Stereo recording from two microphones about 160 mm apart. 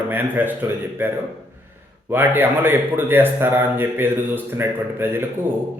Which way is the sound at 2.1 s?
15° right (ahead or behind).